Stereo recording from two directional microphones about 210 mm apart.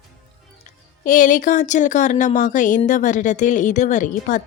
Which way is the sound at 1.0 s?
40° left (ahead or behind).